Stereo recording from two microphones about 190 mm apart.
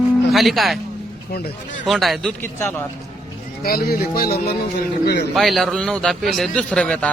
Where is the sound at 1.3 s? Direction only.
55° left (ahead or behind).